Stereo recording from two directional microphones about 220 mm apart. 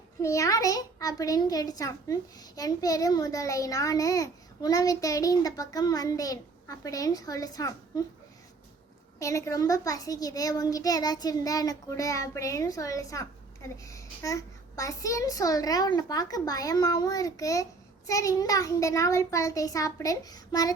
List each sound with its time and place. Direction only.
0.2 s a child's voice: 15° left (ahead or behind)
9.1 s a child's voice: 15° left (ahead or behind)